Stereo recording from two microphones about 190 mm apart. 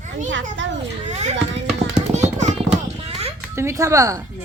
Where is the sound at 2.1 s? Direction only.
35° right (ahead or behind).